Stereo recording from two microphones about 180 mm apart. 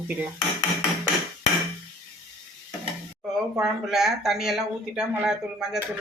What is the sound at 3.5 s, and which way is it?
Speech, centre (ahead or behind).